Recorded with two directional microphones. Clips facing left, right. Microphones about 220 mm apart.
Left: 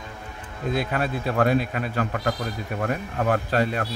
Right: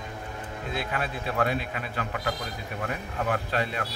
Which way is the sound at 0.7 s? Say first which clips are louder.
Left 6 dB; 45° left (ahead or behind).